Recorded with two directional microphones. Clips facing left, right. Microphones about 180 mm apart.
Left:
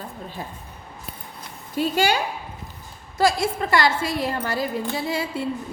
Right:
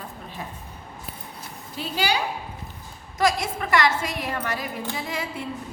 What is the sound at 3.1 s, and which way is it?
A woman's voice, 30° left (ahead or behind).